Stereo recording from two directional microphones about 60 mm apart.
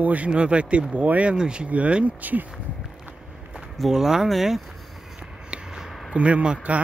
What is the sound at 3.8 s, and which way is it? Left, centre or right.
Speech, centre.